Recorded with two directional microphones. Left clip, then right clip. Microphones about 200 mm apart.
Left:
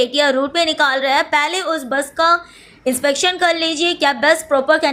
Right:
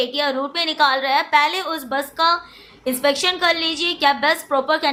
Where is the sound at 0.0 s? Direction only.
25° left (ahead or behind).